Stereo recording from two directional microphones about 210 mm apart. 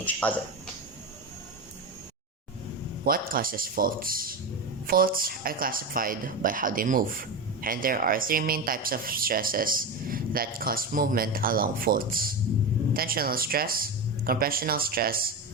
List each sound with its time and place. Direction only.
0.0 s speech: 5° left (ahead or behind)
3.0 s speech: 45° right (ahead or behind)